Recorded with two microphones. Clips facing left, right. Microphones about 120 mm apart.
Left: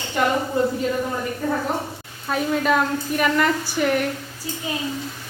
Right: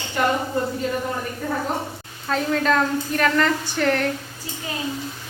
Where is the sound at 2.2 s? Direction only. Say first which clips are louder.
Even; 10° left (ahead or behind).